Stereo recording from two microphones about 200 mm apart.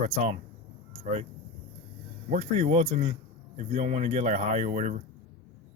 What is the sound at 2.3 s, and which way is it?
Speech, 40° right (ahead or behind).